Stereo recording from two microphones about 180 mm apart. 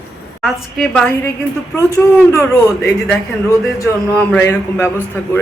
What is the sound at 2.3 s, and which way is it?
Speech, 15° left (ahead or behind).